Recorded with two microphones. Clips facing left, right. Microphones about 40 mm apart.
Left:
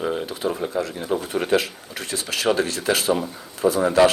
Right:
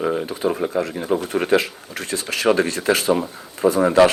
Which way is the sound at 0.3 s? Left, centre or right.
Centre.